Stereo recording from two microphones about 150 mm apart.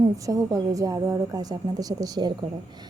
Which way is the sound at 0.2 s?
25° right (ahead or behind).